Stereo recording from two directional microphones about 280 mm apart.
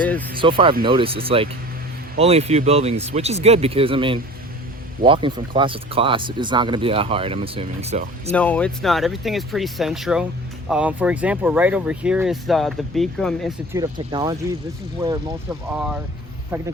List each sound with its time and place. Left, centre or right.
0.0 s music: centre
0.3 s speech: centre
8.3 s speech: centre
13.7 s speech: centre
15.7 s speech: centre